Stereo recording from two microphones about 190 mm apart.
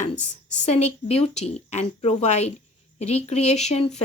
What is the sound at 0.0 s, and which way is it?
A woman's voice, 40° left (ahead or behind).